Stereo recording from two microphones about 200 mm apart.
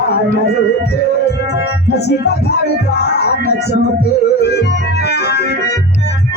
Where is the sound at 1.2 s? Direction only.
55° left (ahead or behind).